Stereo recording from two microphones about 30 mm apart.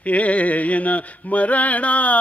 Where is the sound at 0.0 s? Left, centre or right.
Left.